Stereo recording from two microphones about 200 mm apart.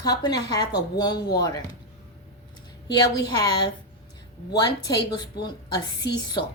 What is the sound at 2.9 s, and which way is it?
A woman's voice, 20° left (ahead or behind).